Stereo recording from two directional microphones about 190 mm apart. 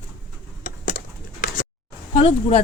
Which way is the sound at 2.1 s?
30° left (ahead or behind).